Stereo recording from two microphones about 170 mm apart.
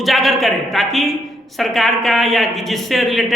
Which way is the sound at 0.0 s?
Centre (ahead or behind).